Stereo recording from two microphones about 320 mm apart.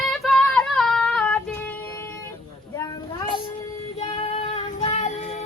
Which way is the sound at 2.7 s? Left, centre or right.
Centre.